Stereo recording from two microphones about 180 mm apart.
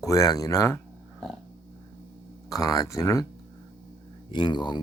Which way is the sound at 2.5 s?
20° left (ahead or behind).